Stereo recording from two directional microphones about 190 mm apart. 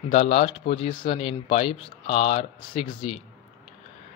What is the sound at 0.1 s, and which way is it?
Speech, 35° left (ahead or behind).